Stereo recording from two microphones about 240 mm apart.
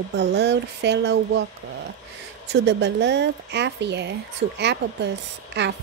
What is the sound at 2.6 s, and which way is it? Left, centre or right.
Speech, right.